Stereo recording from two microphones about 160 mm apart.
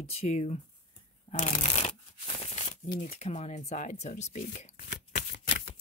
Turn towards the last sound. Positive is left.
turn(degrees=90)